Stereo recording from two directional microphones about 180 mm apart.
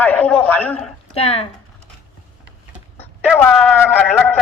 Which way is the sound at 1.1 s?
35° left (ahead or behind).